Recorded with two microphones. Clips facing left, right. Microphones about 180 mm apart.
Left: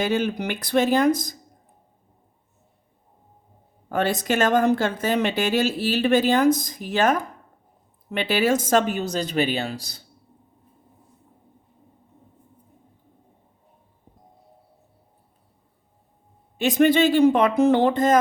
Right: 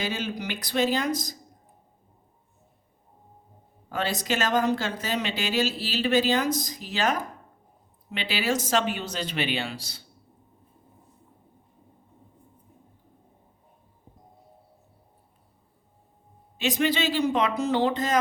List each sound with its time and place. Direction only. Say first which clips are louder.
0.0 s speech: left 7 dB; 55° left (ahead or behind)
3.9 s speech: left 6 dB; 55° left (ahead or behind)
16.6 s speech: left 8 dB; 50° left (ahead or behind)